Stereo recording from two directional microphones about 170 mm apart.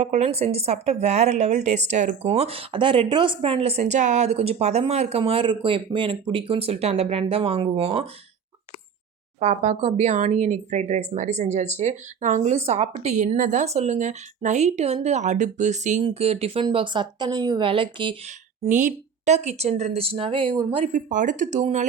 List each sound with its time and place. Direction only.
0.0 s speech: 40° right (ahead or behind)
9.4 s speech: 45° right (ahead or behind)
18.6 s speech: 45° right (ahead or behind); by 20.7 s 30° right (ahead or behind)
20.7 s speech: 45° right (ahead or behind)